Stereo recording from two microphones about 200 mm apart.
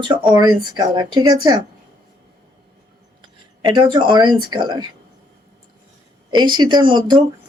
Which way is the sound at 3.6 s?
20° right (ahead or behind).